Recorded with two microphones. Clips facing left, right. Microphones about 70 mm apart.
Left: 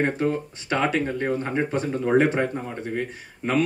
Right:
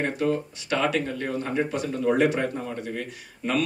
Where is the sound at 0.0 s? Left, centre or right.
Left.